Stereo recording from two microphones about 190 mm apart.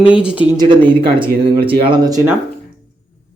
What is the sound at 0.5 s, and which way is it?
Speech, 20° right (ahead or behind).